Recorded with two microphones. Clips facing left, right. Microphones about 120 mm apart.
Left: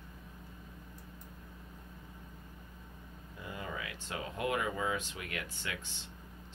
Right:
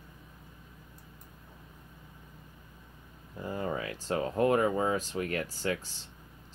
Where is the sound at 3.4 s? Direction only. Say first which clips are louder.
Right 8 dB; 40° right (ahead or behind).